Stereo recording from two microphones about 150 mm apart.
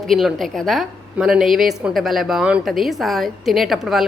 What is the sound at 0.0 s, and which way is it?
A woman's voice, centre (ahead or behind).